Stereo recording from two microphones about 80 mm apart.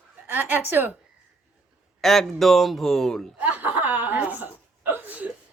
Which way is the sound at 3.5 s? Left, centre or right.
Right.